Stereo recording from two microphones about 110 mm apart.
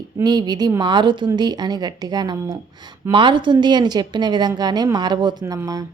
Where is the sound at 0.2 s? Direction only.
40° right (ahead or behind).